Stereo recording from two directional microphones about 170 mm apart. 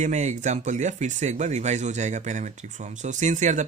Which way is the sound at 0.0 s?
45° right (ahead or behind).